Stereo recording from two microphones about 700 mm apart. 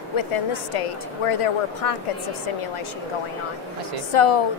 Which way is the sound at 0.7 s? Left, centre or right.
Left.